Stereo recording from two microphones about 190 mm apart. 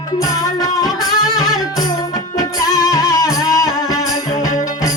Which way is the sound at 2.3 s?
20° left (ahead or behind).